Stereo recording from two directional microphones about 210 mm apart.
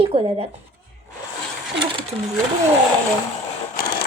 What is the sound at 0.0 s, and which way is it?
Speech, 25° right (ahead or behind).